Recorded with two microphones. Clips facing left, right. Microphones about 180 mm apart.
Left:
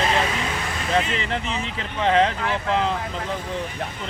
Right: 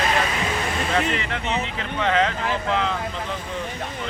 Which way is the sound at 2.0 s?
35° left (ahead or behind).